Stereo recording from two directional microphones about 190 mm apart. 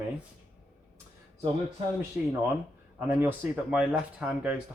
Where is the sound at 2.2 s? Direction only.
10° right (ahead or behind).